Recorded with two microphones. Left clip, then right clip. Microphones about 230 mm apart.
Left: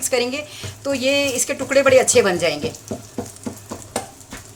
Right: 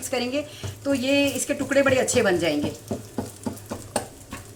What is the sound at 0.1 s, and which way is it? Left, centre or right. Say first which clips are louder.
Speech: left 4 dB; left.